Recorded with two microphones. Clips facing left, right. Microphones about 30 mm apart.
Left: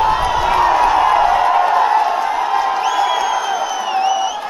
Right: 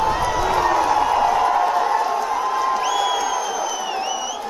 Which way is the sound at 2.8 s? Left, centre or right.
Left.